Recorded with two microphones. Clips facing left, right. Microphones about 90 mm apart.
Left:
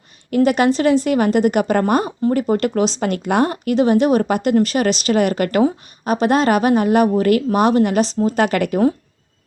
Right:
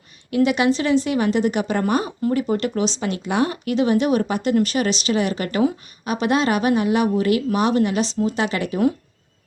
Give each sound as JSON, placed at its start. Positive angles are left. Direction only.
{"t": 0.3, "sound": "speech", "side_deg": 45}